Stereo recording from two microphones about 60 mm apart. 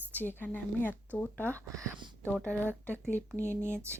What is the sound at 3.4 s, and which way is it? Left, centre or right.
Speech, right.